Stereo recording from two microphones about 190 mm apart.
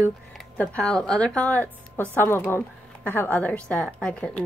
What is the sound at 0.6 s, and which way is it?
A woman's voice, 5° left (ahead or behind).